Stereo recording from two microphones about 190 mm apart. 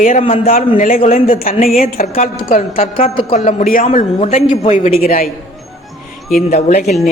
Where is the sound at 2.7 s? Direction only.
30° left (ahead or behind).